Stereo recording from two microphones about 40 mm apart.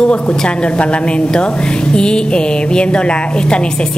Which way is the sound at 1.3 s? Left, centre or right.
Left.